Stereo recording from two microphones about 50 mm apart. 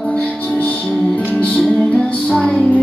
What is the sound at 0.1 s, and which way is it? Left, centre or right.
Music, left.